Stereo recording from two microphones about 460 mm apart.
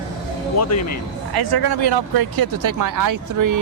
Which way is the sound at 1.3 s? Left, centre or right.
Right.